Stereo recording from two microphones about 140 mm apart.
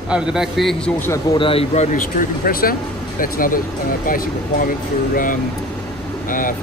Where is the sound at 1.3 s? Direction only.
40° left (ahead or behind).